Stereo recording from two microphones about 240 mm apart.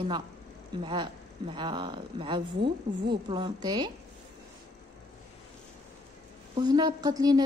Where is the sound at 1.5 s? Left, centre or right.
Centre.